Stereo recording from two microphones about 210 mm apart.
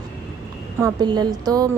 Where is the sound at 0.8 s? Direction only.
15° right (ahead or behind).